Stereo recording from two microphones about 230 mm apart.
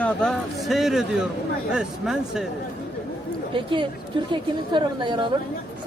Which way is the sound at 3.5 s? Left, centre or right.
Right.